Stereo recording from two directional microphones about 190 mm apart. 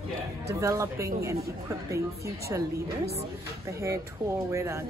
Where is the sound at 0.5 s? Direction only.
15° right (ahead or behind).